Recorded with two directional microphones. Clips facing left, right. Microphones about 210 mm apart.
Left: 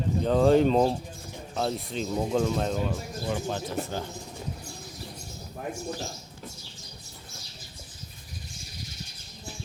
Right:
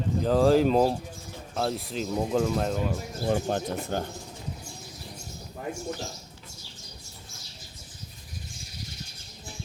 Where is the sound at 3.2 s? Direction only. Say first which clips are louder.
Right 5 dB; 50° right (ahead or behind).